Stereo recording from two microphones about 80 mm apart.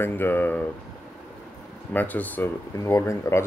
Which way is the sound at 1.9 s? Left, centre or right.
Left.